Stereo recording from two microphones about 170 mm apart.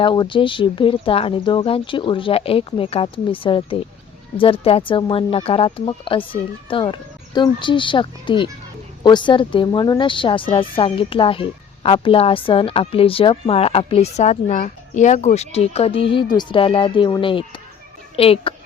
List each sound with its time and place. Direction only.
0.0 s speech: 30° left (ahead or behind)